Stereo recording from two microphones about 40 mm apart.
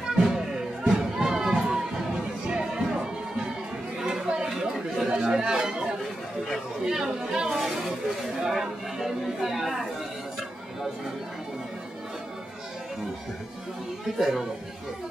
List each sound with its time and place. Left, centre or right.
0.1 s music: centre
4.6 s chatter: centre
5.1 s chatter: right
6.9 s chatter: centre
14.0 s a man's voice: centre